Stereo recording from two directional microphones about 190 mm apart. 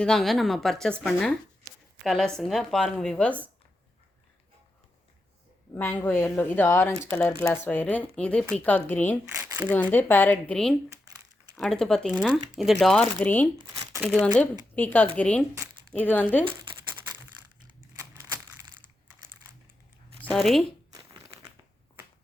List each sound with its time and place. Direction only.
0.0 s speech: centre (ahead or behind)
2.0 s speech: centre (ahead or behind)
5.7 s speech: 10° left (ahead or behind)
9.2 s speech: 10° right (ahead or behind)
9.9 s speech: 10° left (ahead or behind)
11.0 s crumpling: 20° right (ahead or behind)
11.6 s speech: 5° left (ahead or behind)
17.9 s a sound: 15° right (ahead or behind)
20.3 s speech: centre (ahead or behind)
20.9 s a sound: 20° right (ahead or behind)